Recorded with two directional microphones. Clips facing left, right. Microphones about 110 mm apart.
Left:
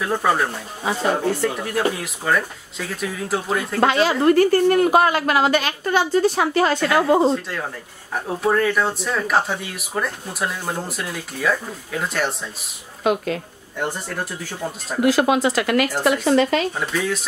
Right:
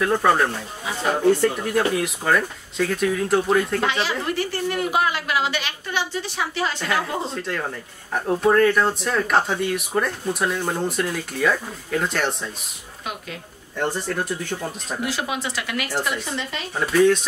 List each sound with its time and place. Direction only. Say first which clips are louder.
0.0 s speech: right 1 dB; 5° left (ahead or behind)
3.8 s a woman's voice: left 8 dB; 45° left (ahead or behind)
7.4 s speech: right 1 dB; 5° left (ahead or behind)
13.7 s speech: right 2 dB; 5° left (ahead or behind)
15.3 s a woman's voice: left 9 dB; 45° left (ahead or behind)
16.3 s speech: left 13 dB; 70° left (ahead or behind)
16.8 s speech: right 7 dB; centre (ahead or behind)